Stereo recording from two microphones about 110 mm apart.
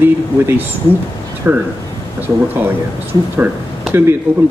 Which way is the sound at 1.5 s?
20° right (ahead or behind).